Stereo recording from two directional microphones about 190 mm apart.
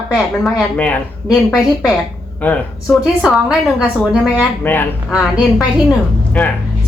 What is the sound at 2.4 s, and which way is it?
Speech, 5° left (ahead or behind).